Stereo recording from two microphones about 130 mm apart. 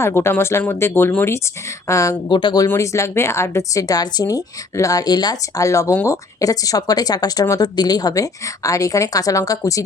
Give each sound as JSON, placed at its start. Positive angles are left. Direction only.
{"t": 0.0, "sound": "speech", "side_deg": 20}
{"t": 2.3, "sound": "speech", "side_deg": 35}
{"t": 2.6, "sound": "speech", "side_deg": 20}